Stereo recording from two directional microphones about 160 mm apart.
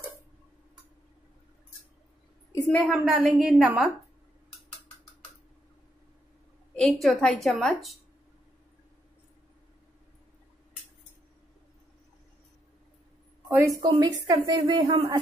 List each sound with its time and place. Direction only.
2.9 s a woman's voice: centre (ahead or behind)
6.7 s a woman's voice: 5° left (ahead or behind)
13.5 s a woman's voice: 20° right (ahead or behind)